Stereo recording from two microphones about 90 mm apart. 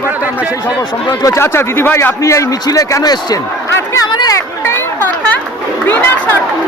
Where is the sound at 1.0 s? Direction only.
35° left (ahead or behind).